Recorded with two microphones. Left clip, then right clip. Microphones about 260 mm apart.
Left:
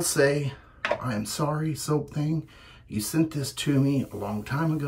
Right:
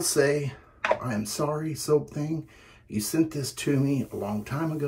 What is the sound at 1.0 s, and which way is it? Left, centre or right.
Speech, left.